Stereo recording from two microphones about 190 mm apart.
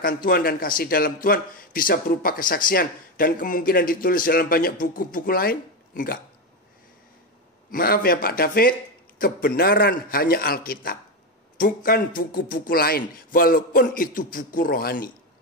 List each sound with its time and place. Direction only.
0.0 s speech: 50° left (ahead or behind)
7.7 s speech: 50° left (ahead or behind)